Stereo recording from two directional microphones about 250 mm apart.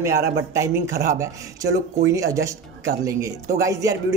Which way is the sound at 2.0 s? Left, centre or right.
Centre.